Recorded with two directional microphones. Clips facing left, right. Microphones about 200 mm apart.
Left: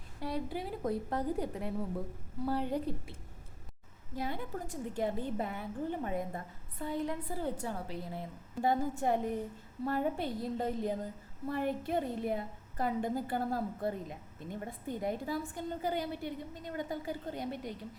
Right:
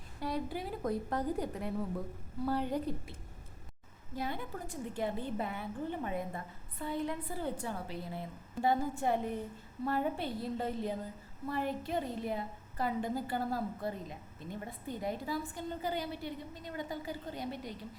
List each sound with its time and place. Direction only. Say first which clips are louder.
0.2 s a woman's voice: even; 30° left (ahead or behind)
4.3 s a woman's voice: left 1 dB; 40° left (ahead or behind)